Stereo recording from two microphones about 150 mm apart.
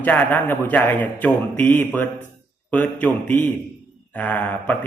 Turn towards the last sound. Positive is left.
turn(degrees=10)  # may be behind; listen again after turning